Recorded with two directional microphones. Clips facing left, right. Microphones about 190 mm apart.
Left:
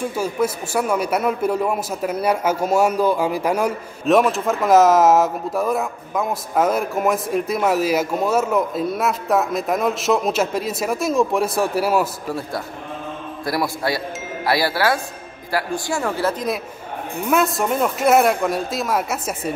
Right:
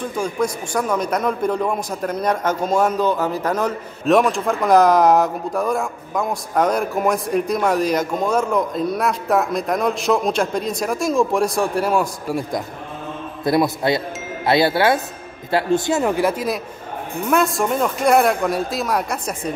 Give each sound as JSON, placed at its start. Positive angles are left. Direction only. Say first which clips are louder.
{"t": 0.0, "sound": "a man's voice", "louder": "left 1 dB", "side_deg": 5}
{"t": 12.3, "sound": "a man's voice", "louder": "right 3 dB", "side_deg": -15}
{"t": 17.3, "sound": "a man's voice", "louder": "right 1 dB", "side_deg": 0}